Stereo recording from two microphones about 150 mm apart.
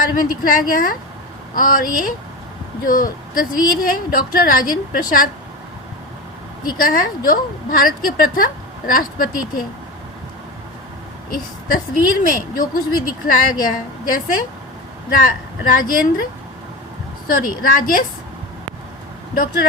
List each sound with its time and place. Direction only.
0.0 s a woman's voice: 70° left (ahead or behind)
6.7 s a woman's voice: 70° left (ahead or behind)
11.3 s a woman's voice: 70° left (ahead or behind)
17.2 s a woman's voice: 70° left (ahead or behind)
19.3 s speech: 75° left (ahead or behind)